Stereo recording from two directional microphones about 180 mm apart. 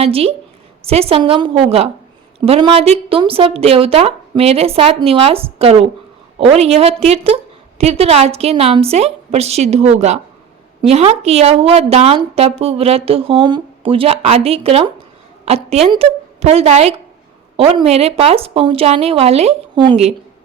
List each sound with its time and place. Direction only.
0.0 s a woman's voice: 35° right (ahead or behind)